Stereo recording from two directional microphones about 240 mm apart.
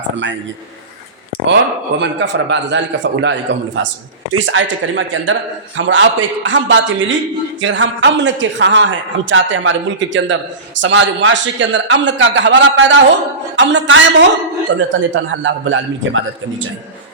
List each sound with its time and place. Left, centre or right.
2.0 s a man's voice: right
4.4 s a man's voice: right